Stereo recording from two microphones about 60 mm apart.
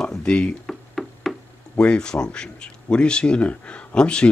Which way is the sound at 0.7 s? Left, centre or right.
Centre.